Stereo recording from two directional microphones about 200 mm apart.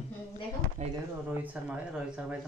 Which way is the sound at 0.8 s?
35° right (ahead or behind).